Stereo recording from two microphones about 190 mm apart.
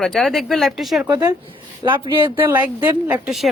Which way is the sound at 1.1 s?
15° right (ahead or behind).